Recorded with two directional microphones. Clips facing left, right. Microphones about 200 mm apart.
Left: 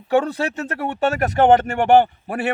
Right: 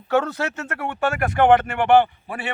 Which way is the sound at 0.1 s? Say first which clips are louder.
Left 3 dB; 15° left (ahead or behind).